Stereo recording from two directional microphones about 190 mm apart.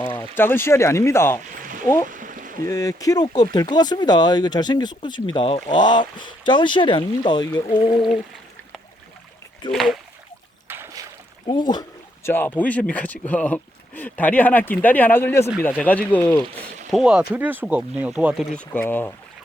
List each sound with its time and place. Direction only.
0.0 s speech: 20° left (ahead or behind)
2.0 s a sound: 45° right (ahead or behind)
2.6 s speech: 15° left (ahead or behind)
9.7 s speech: centre (ahead or behind)
10.7 s boat: 10° right (ahead or behind)
11.4 s speech: 20° left (ahead or behind)
16.9 s speech: 5° right (ahead or behind)
18.5 s speech: 10° left (ahead or behind)